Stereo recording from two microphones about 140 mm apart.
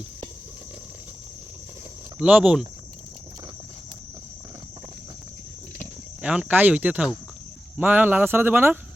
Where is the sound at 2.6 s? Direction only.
30° right (ahead or behind).